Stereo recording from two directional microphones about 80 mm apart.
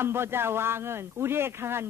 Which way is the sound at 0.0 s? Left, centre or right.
Right.